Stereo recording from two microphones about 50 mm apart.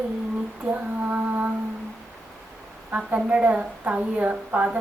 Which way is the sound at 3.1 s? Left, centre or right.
Right.